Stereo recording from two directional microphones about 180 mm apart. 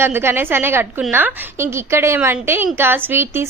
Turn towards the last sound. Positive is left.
turn(degrees=-15)  # may be behind; listen again after turning